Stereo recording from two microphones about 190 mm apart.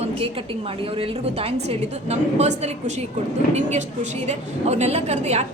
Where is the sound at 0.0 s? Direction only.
30° right (ahead or behind).